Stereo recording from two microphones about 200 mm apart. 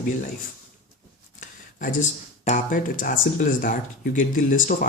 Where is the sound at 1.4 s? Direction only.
40° left (ahead or behind).